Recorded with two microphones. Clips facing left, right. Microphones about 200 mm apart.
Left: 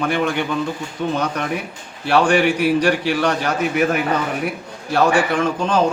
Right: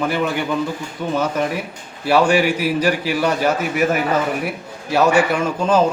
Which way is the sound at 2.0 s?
5° right (ahead or behind).